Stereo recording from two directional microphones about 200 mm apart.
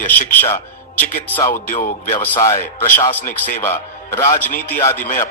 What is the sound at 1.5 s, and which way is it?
Speech, 40° left (ahead or behind).